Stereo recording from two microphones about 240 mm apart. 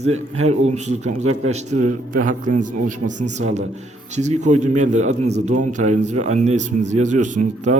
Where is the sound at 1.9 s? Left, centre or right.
Right.